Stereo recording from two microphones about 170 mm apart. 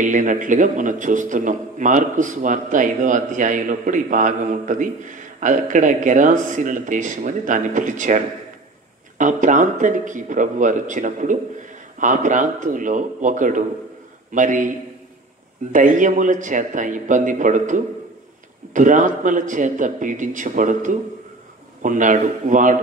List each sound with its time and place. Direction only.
0.0 s a man's voice: 50° right (ahead or behind)
9.2 s a man's voice: 50° right (ahead or behind)
15.7 s a man's voice: 50° right (ahead or behind)